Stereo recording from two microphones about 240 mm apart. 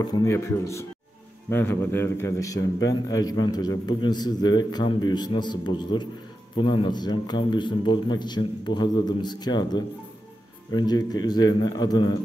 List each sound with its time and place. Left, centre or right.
0.0 s a man's voice: centre